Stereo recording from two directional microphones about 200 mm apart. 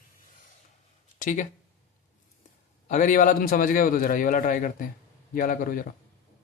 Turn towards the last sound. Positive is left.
turn(degrees=45)  # may be behind; listen again after turning